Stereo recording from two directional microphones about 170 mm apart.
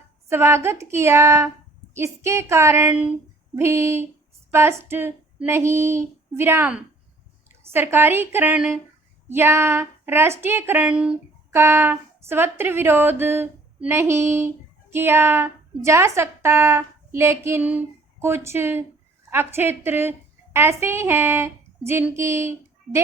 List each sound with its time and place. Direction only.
0.3 s a woman's voice: 15° right (ahead or behind)